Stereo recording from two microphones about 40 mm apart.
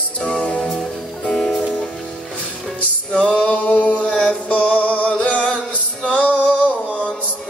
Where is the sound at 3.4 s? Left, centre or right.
Left.